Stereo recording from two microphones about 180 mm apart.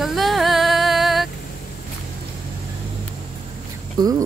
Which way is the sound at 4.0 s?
20° right (ahead or behind).